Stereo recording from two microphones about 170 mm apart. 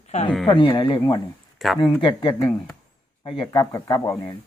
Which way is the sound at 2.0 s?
30° left (ahead or behind).